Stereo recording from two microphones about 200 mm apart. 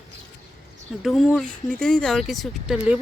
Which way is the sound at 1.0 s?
Centre (ahead or behind).